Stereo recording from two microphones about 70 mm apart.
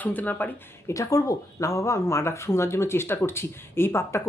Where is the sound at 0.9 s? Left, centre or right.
Left.